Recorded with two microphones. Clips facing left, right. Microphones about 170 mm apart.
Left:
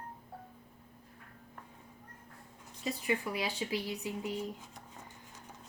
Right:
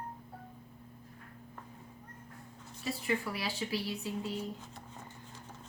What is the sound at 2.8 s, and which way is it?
Speech, 15° left (ahead or behind).